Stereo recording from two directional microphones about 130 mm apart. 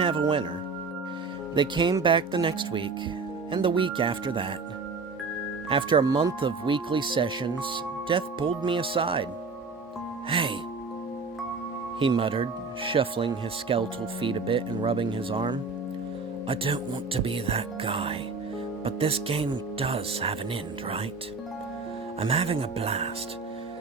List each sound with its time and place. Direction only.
0.0 s speech: 45° right (ahead or behind)
1.5 s speech: 35° right (ahead or behind)
5.6 s speech: 40° right (ahead or behind)
10.2 s speech: 45° right (ahead or behind)
11.9 s speech: 40° right (ahead or behind)
22.2 s speech: 50° right (ahead or behind)